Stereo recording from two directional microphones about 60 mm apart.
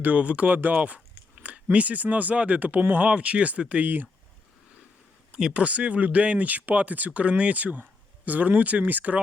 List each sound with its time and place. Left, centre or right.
0.0 s speech: right
5.5 s speech: right